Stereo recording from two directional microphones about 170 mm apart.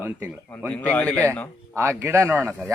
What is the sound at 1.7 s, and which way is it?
Speech, 15° right (ahead or behind).